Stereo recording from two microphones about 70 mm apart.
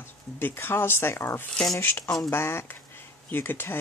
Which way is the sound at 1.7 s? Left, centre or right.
Left.